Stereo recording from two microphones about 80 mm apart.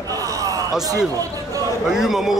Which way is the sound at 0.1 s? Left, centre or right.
Right.